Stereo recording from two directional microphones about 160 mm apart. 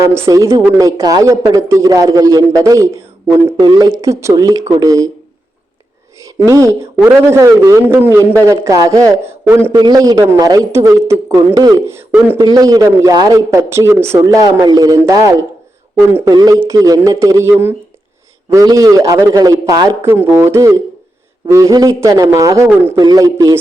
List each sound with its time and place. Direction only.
0.0 s a woman's voice: 20° right (ahead or behind)
6.1 s a man's voice: 20° right (ahead or behind)